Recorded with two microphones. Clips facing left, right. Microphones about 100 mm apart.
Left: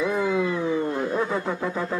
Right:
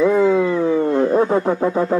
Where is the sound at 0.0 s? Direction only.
30° right (ahead or behind).